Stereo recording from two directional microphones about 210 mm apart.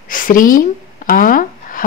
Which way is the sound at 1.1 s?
40° left (ahead or behind).